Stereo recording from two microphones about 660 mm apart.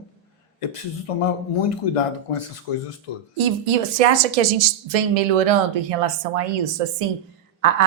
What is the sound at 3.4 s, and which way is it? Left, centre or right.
A woman's voice, right.